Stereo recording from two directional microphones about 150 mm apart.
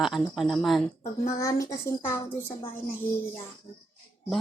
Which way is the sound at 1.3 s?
20° left (ahead or behind).